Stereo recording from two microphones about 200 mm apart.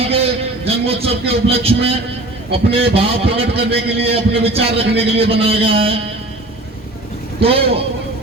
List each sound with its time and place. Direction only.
0.0 s a sound: 30° right (ahead or behind)
2.5 s a man's voice: 30° right (ahead or behind)
7.3 s a man's voice: 30° right (ahead or behind)